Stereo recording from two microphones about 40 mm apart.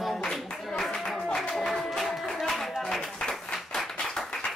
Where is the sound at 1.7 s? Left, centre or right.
Centre.